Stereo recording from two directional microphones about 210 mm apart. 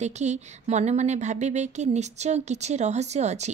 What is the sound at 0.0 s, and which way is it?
A woman's voice, 35° right (ahead or behind).